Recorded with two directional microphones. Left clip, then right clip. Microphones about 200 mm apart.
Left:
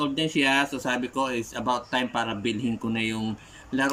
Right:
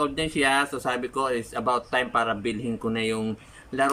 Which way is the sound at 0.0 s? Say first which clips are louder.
Right 1 dB; 15° left (ahead or behind).